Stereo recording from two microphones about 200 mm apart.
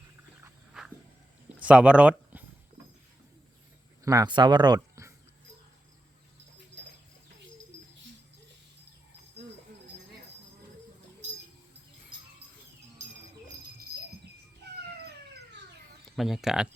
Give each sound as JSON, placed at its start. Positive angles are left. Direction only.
{"t": 0.7, "sound": "a sound", "side_deg": -5}
{"t": 1.6, "sound": "speech", "side_deg": -5}
{"t": 4.0, "sound": "speech", "side_deg": -20}
{"t": 16.1, "sound": "speech", "side_deg": 0}